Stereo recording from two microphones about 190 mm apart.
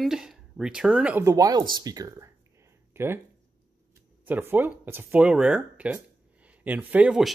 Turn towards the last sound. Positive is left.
turn(degrees=-5)  # may be behind; listen again after turning